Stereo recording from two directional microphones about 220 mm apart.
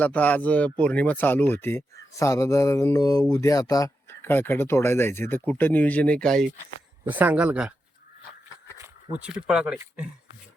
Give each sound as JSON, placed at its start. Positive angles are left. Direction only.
{"t": 0.0, "sound": "speech", "side_deg": 5}
{"t": 7.0, "sound": "speech", "side_deg": -10}
{"t": 9.5, "sound": "speech", "side_deg": -5}